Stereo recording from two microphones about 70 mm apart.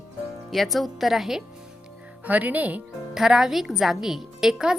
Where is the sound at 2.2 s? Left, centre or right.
Right.